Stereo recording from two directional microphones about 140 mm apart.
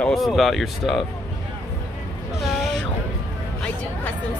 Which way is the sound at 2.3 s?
Centre (ahead or behind).